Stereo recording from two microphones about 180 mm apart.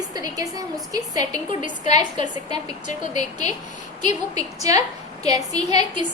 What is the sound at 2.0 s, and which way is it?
Speech, 25° right (ahead or behind).